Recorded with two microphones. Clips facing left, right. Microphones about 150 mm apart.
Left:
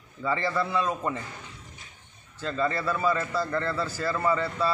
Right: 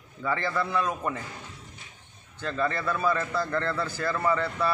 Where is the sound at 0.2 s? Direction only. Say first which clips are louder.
Left 1 dB; 10° left (ahead or behind).